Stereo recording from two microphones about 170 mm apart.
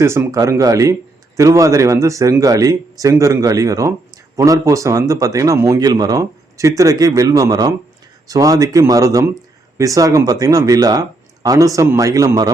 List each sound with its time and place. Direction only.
0.0 s speech: 15° right (ahead or behind)